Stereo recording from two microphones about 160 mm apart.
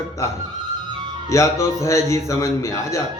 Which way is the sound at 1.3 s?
20° left (ahead or behind).